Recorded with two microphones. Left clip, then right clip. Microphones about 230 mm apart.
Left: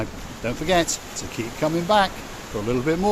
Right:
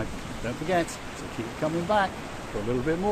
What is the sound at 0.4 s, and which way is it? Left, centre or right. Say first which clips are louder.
Speech: left 6 dB; left.